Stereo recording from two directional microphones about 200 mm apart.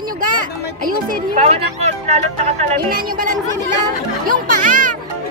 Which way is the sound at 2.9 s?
45° right (ahead or behind).